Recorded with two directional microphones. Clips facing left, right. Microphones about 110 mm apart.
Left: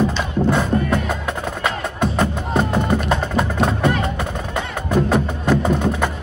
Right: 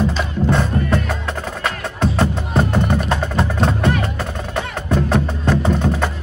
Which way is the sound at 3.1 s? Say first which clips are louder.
Even; 5° left (ahead or behind).